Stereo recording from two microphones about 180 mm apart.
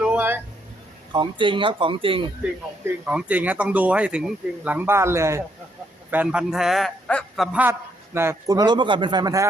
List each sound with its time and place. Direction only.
0.0 s a sound: 10° right (ahead or behind)
1.1 s speech: 25° right (ahead or behind)
2.4 s a man's voice: 5° right (ahead or behind)